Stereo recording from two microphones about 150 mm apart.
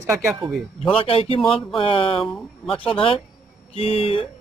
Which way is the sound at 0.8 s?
40° left (ahead or behind).